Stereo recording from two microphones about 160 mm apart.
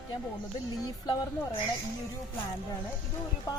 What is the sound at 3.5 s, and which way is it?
Speech, 20° left (ahead or behind).